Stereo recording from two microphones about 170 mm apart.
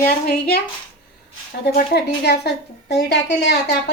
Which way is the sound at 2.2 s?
75° left (ahead or behind).